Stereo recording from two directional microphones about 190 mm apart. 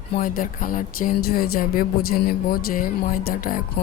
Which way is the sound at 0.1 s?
50° left (ahead or behind).